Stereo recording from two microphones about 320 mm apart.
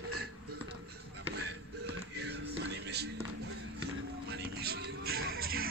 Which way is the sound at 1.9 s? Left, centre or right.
Right.